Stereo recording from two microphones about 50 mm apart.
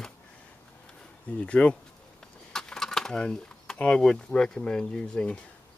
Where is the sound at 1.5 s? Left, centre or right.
Left.